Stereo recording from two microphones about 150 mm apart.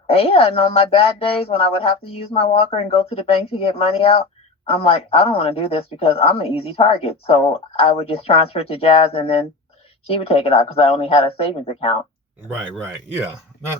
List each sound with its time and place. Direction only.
0.1 s speech: 40° left (ahead or behind)
12.5 s speech: 5° right (ahead or behind)